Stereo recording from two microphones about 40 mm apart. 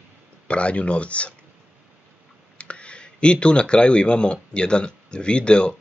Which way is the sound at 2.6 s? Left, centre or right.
Left.